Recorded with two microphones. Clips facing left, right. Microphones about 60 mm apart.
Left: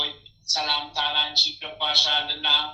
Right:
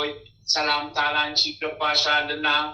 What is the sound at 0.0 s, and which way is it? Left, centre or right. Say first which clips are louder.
Speech: right 5 dB; right.